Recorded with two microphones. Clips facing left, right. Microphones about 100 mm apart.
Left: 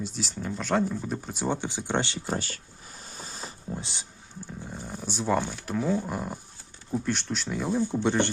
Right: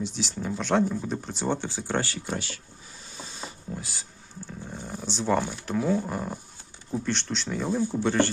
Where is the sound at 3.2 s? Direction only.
40° left (ahead or behind).